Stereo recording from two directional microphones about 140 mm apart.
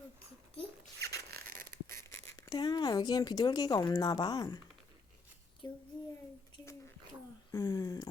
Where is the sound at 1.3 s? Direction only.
90° right.